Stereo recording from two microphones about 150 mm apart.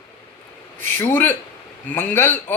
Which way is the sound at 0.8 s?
15° left (ahead or behind).